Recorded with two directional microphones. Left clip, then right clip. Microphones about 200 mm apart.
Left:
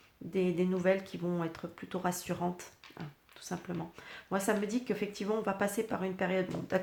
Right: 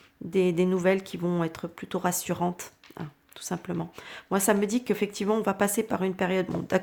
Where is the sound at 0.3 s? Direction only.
40° right (ahead or behind).